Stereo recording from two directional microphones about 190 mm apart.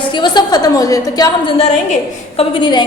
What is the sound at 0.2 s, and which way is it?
A woman's voice, 20° left (ahead or behind).